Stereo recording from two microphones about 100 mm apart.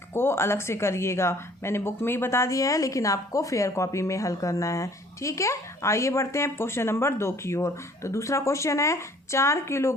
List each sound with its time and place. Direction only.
0.1 s speech: 25° left (ahead or behind)